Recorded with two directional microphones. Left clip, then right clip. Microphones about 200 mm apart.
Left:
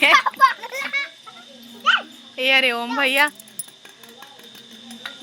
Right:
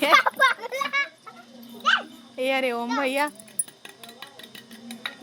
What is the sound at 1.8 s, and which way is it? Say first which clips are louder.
Dog: left 4 dB; 5° right (ahead or behind).